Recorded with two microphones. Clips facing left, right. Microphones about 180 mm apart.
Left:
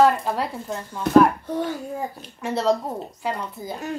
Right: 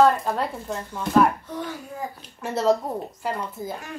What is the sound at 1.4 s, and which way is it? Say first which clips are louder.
Speech: left 6 dB; 30° left (ahead or behind).